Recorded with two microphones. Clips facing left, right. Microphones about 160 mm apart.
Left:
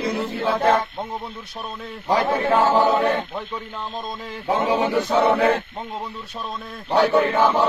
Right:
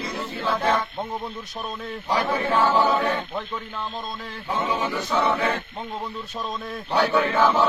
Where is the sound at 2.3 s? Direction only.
50° left (ahead or behind).